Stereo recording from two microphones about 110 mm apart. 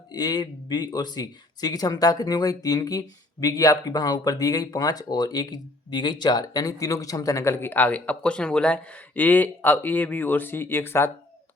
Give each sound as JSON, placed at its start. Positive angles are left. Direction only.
{"t": 0.1, "sound": "speech", "side_deg": 35}